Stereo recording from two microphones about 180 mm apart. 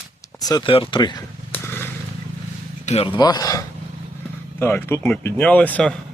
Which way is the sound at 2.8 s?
35° left (ahead or behind).